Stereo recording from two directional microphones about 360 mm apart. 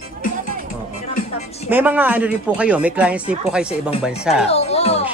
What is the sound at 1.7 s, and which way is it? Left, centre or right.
Speech, centre.